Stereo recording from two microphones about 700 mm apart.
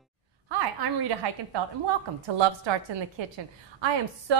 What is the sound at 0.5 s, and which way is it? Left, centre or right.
A woman's voice, right.